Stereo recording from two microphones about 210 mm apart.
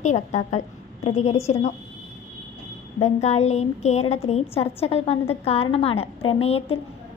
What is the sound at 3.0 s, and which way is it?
A woman's voice, 30° left (ahead or behind).